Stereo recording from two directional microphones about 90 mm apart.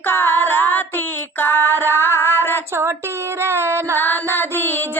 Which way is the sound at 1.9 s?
25° right (ahead or behind).